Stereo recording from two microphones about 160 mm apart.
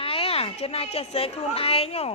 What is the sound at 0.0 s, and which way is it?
A woman's voice, 35° left (ahead or behind).